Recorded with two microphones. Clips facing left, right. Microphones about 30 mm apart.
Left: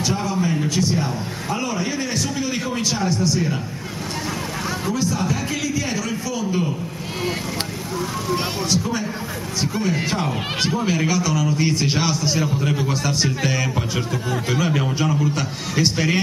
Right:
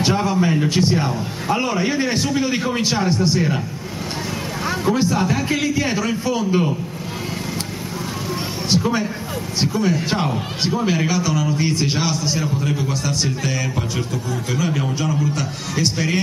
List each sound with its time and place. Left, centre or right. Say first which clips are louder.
0.0 s a sound: right 4 dB; right
0.7 s a man's voice: right 3 dB; right
4.9 s a man's voice: right 4 dB; right
8.6 s a man's voice: right 7 dB; right
10.0 s a man's voice: right 1 dB; centre